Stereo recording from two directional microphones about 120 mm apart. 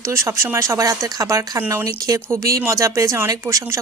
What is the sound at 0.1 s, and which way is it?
Speech, 25° right (ahead or behind).